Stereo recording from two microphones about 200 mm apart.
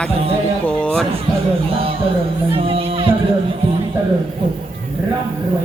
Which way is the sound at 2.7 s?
25° right (ahead or behind).